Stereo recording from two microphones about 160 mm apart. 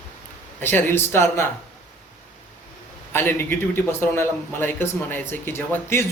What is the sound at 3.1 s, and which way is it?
A man's voice, 15° left (ahead or behind).